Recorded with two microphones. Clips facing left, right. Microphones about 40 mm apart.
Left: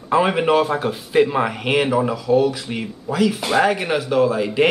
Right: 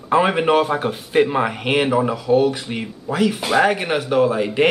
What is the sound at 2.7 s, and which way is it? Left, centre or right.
Speech, centre.